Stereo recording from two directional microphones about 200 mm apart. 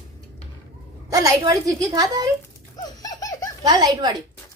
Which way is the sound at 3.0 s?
20° left (ahead or behind).